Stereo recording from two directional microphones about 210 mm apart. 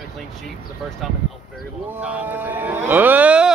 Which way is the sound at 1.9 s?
5° right (ahead or behind).